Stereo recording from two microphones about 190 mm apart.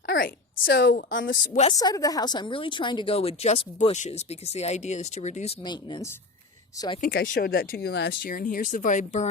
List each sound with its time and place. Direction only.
0.0 s a woman's voice: 50° left (ahead or behind)
1.6 s a woman's voice: 20° left (ahead or behind); by 5.5 s 35° left (ahead or behind)
5.6 s speech: 25° left (ahead or behind)
7.0 s speech: 55° left (ahead or behind)